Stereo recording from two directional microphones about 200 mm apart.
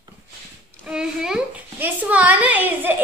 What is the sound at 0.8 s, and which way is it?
A woman's voice, 5° right (ahead or behind).